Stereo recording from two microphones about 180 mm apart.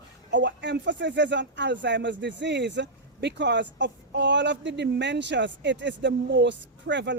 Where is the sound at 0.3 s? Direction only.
75° right (ahead or behind).